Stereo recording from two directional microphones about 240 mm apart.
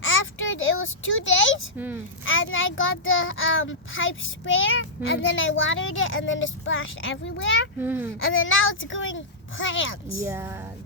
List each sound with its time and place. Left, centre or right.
0.0 s a sound: left
2.2 s a child's voice: left
7.8 s speech: centre
8.2 s a child's voice: left
10.2 s speech: centre